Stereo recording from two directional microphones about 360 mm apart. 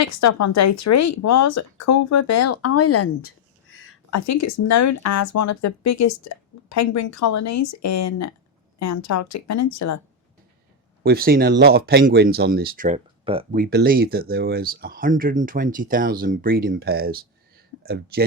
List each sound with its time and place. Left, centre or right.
0.0 s speech: left
4.1 s speech: left
11.0 s speech: right